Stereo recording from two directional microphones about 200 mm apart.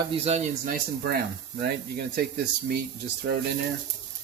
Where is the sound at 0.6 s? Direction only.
50° right (ahead or behind).